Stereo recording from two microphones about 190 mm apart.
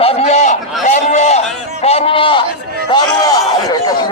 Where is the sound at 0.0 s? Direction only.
35° left (ahead or behind).